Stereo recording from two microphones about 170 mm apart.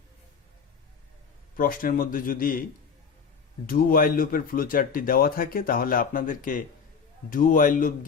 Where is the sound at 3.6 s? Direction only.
55° left (ahead or behind).